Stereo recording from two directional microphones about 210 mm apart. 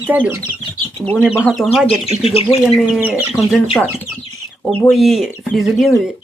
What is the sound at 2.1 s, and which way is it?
Speech, 30° right (ahead or behind).